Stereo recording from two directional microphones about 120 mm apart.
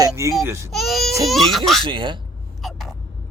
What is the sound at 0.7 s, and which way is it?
Baby cry, centre (ahead or behind).